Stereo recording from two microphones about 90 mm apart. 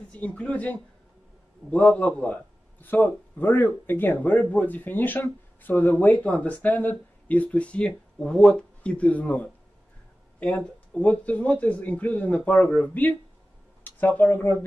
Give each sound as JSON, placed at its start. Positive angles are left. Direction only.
{"t": 0.1, "sound": "speech", "side_deg": 15}